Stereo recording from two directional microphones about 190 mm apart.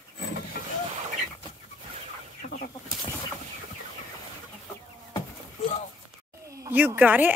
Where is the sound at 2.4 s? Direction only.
45° left (ahead or behind).